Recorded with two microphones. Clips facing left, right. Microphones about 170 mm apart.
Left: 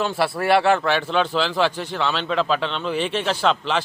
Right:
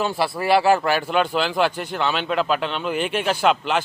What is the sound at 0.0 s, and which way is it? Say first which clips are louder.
A man's voice: left 1 dB; centre (ahead or behind).